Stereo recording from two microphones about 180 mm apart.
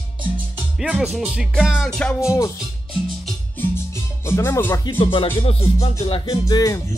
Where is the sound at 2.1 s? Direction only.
15° left (ahead or behind).